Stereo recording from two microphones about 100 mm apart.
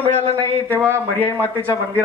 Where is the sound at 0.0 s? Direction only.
75° right (ahead or behind).